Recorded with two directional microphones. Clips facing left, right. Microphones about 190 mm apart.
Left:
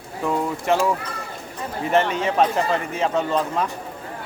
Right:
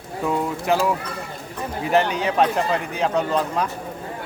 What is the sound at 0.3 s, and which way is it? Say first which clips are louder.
A man's voice: even; centre (ahead or behind).